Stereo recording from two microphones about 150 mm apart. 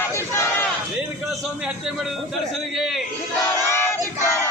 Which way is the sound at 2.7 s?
Centre (ahead or behind).